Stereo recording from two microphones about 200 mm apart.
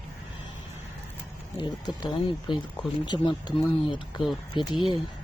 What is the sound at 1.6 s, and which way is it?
Speech, 20° left (ahead or behind).